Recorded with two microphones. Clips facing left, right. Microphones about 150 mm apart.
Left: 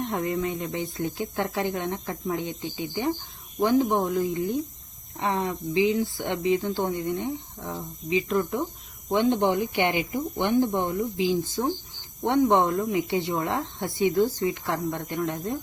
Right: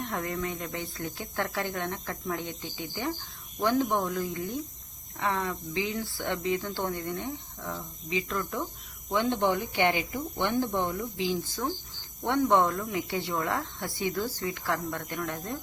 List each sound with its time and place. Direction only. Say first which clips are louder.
0.1 s speech: left 5 dB; 20° left (ahead or behind)